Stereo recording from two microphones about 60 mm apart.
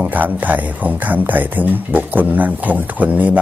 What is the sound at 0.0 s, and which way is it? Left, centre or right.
Speech, right.